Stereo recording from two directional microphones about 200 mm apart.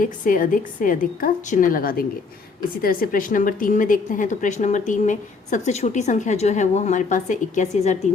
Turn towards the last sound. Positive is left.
turn(degrees=35)  # may be behind; listen again after turning